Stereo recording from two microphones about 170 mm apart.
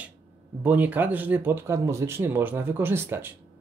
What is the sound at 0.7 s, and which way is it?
Speech, 10° right (ahead or behind).